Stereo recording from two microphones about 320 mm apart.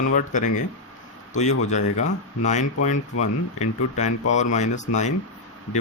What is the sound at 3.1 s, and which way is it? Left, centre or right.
Speech, left.